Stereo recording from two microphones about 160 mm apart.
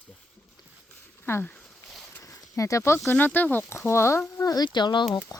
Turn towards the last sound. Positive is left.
turn(degrees=20)  # may be behind; listen again after turning